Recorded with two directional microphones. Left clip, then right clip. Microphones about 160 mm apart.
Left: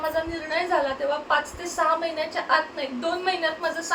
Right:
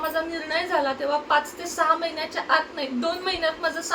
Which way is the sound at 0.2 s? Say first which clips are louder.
Right 1 dB; 15° right (ahead or behind).